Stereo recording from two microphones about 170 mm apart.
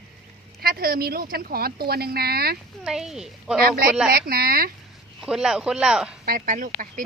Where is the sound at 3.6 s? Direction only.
60° right (ahead or behind).